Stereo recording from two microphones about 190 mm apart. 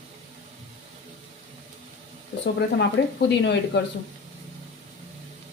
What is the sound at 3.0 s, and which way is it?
Speech, 65° left (ahead or behind).